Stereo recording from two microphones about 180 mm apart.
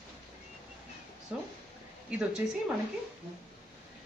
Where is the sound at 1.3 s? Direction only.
5° right (ahead or behind).